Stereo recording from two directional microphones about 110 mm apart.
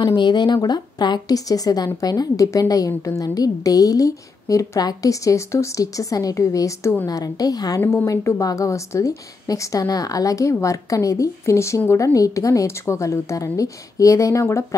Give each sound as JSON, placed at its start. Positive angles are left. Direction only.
{"t": 0.0, "sound": "a woman's voice", "side_deg": 40}
{"t": 7.1, "sound": "a woman's voice", "side_deg": 35}